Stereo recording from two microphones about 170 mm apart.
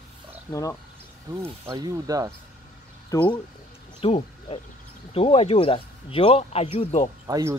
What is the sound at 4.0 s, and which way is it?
Speech, 35° left (ahead or behind).